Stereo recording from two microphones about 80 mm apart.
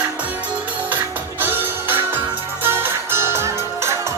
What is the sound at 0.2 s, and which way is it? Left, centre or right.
Music, centre.